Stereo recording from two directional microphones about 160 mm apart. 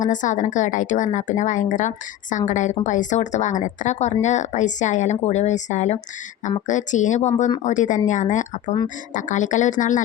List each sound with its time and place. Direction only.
0.0 s speech: 50° left (ahead or behind)